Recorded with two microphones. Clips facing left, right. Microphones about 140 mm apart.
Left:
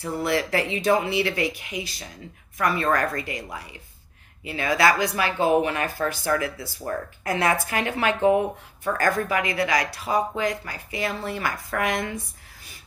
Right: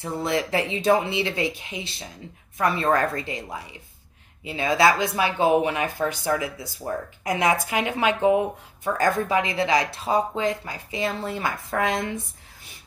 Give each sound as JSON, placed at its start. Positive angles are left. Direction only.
{"t": 0.0, "sound": "speech", "side_deg": -20}